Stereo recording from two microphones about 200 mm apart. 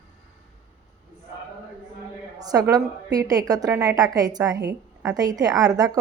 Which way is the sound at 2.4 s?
20° right (ahead or behind).